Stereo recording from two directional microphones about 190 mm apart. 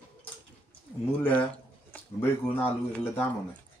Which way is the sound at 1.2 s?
10° left (ahead or behind).